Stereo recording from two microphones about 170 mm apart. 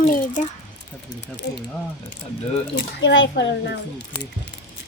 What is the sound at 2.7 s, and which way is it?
A child's voice, 90° left.